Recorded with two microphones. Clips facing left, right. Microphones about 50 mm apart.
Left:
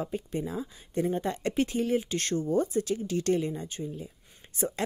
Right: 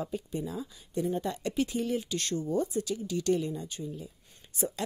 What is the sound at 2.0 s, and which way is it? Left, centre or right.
Speech, left.